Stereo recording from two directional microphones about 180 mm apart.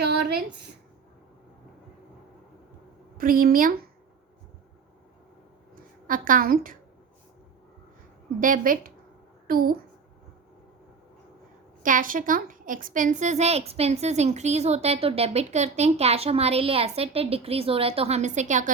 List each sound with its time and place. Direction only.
3.2 s a woman's voice: 50° right (ahead or behind)
6.1 s a woman's voice: 50° right (ahead or behind)
8.4 s a woman's voice: 50° right (ahead or behind)
11.8 s a woman's voice: 50° right (ahead or behind)